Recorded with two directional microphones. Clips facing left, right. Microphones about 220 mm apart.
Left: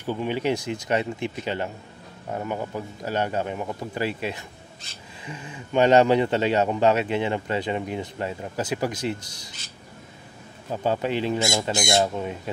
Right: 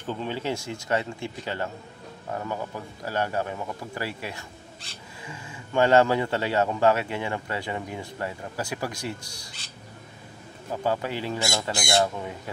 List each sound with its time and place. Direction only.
0.0 s a man's voice: 10° left (ahead or behind)
10.8 s a man's voice: 20° left (ahead or behind)